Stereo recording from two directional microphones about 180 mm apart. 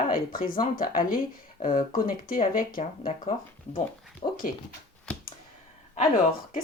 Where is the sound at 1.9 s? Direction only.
50° left (ahead or behind).